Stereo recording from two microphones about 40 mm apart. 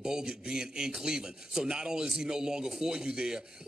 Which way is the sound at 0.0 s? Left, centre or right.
Centre.